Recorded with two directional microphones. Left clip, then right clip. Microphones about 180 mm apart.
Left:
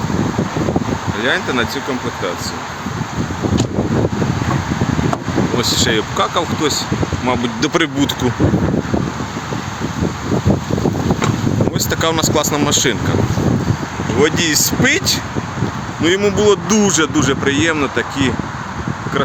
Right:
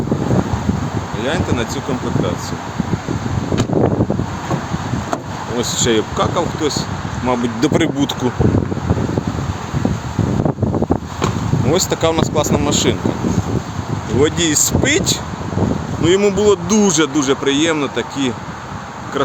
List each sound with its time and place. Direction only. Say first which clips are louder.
1.2 s speech: left 3 dB; centre (ahead or behind)
5.5 s speech: right 1 dB; 5° right (ahead or behind); by 6.8 s 10° left (ahead or behind)
7.6 s speech: even; 25° right (ahead or behind)
7.9 s speech: left 1 dB; 5° right (ahead or behind)
11.7 s speech: right 5 dB; centre (ahead or behind)
14.2 s speech: left 1 dB; 15° right (ahead or behind); by 18.3 s 5° left (ahead or behind)